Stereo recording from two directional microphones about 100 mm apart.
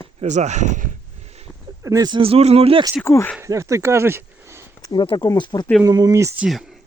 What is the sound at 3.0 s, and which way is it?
Speech, 30° left (ahead or behind).